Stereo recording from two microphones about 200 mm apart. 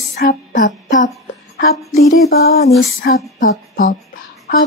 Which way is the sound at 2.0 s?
50° left (ahead or behind).